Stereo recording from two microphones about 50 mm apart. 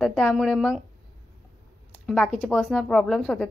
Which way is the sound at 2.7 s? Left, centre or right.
Centre.